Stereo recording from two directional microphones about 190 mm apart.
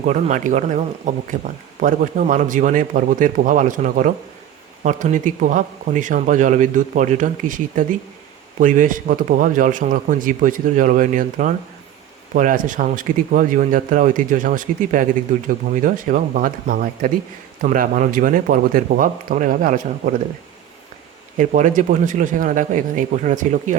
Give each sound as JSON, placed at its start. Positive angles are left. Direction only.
{"t": 0.0, "sound": "a man's voice", "side_deg": -40}
{"t": 21.3, "sound": "a man's voice", "side_deg": -40}